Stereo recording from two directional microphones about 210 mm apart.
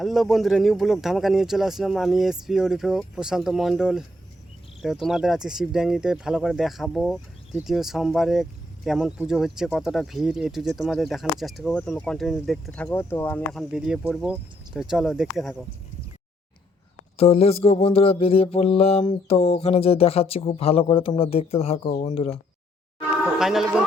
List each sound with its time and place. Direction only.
0.0 s speech: centre (ahead or behind)
17.2 s mantra: 30° left (ahead or behind)
23.2 s speech: centre (ahead or behind)